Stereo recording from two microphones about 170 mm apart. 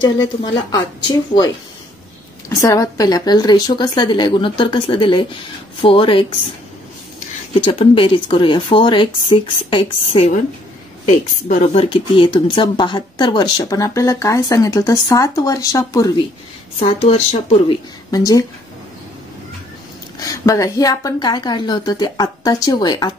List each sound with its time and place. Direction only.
0.7 s speech: 25° left (ahead or behind)
2.6 s speech: 20° left (ahead or behind)
7.6 s speech: 30° left (ahead or behind)
11.1 s a woman's voice: 50° left (ahead or behind)
11.7 s speech: 35° left (ahead or behind)
16.8 s speech: 35° left (ahead or behind)
18.1 s speech: 20° left (ahead or behind)
20.2 s speech: 20° left (ahead or behind)